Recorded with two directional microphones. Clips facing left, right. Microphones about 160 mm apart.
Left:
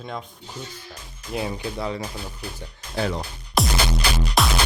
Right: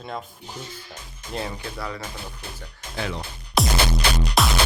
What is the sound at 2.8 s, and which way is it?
Music, 40° left (ahead or behind).